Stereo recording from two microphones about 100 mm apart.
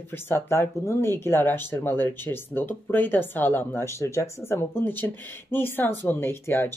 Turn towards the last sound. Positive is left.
turn(degrees=25)  # may be behind; listen again after turning